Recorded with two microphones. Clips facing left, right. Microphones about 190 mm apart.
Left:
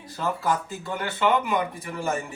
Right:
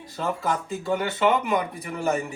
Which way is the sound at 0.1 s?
Centre (ahead or behind).